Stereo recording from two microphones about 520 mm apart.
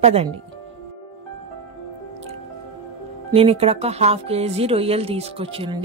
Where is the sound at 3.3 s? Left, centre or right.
Centre.